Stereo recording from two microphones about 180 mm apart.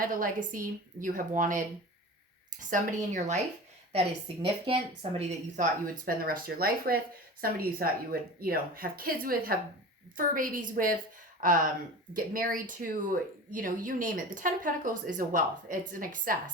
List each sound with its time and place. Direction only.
0.0 s speech: 50° right (ahead or behind)
4.6 s a woman's voice: 30° right (ahead or behind); by 16.3 s 50° right (ahead or behind)